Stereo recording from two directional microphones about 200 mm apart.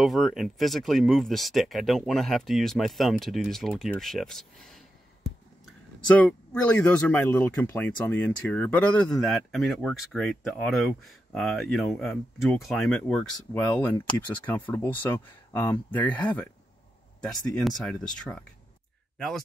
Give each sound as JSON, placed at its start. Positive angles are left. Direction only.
{"t": 0.0, "sound": "speech", "side_deg": 0}
{"t": 5.9, "sound": "speech", "side_deg": 5}